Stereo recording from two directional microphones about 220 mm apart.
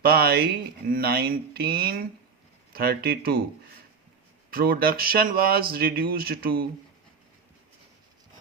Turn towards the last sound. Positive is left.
turn(degrees=-45)  # may be behind; listen again after turning